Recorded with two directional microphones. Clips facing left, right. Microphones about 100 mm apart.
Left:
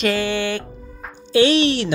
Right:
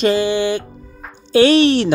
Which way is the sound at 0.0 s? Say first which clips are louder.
Right 5 dB; 20° right (ahead or behind).